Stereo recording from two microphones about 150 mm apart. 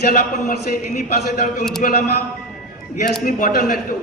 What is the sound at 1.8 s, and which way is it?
Speech, 60° left (ahead or behind).